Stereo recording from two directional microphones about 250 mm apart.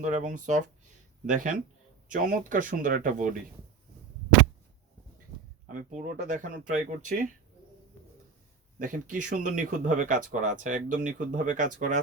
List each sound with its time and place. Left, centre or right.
0.0 s speech: right
5.6 s speech: right
8.8 s speech: right